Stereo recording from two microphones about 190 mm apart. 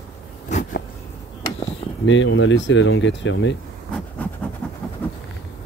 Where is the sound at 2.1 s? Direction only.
85° left; by 3.6 s 70° left (ahead or behind).